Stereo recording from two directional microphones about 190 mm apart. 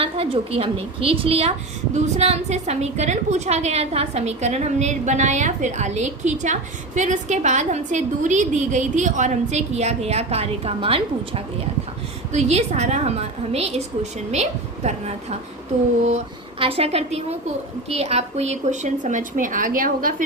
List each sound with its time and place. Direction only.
0.0 s a woman's voice: 30° right (ahead or behind); by 20.2 s 45° right (ahead or behind)